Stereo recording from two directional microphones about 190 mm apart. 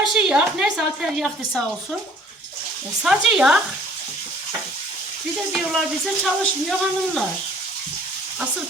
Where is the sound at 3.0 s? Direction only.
5° right (ahead or behind).